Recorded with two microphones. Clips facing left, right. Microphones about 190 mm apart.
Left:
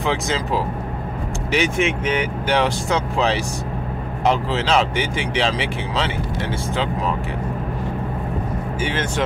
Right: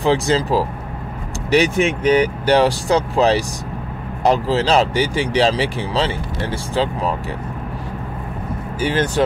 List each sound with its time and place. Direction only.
0.0 s speech: 35° right (ahead or behind)
8.8 s speech: 35° right (ahead or behind)